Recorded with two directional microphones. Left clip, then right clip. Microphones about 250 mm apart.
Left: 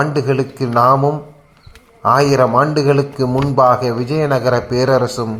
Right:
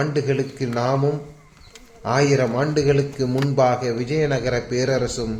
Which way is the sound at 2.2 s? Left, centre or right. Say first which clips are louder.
Left 5 dB; centre.